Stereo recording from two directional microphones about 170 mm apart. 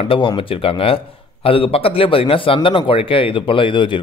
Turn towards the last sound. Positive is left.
turn(degrees=30)  # may be behind; listen again after turning